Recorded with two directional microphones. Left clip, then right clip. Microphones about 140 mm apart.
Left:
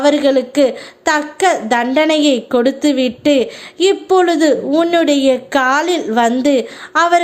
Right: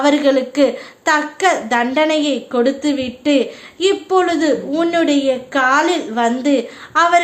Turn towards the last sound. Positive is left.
turn(degrees=40)  # may be behind; listen again after turning